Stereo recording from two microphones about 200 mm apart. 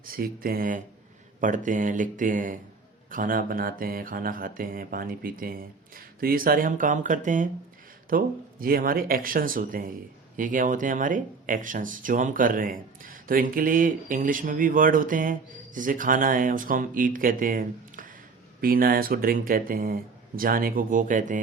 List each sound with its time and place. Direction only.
0.0 s speech: 45° right (ahead or behind)